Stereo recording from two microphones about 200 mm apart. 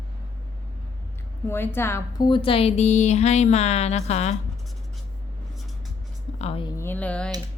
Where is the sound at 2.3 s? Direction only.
25° left (ahead or behind).